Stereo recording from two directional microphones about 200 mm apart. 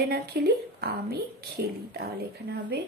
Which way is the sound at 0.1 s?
50° right (ahead or behind).